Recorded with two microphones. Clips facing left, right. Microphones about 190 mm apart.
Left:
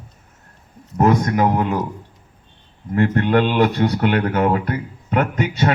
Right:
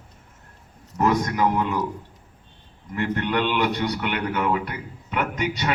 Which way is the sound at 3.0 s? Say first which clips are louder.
Left 8 dB; 45° left (ahead or behind).